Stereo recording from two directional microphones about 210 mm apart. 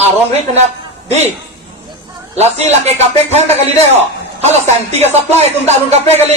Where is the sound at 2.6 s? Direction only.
30° right (ahead or behind).